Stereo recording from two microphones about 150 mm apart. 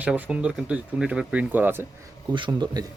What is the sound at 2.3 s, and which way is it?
Speech, 30° right (ahead or behind).